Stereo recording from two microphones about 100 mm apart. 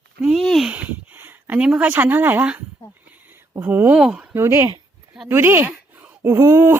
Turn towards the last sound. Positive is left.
turn(degrees=-25)  # may be behind; listen again after turning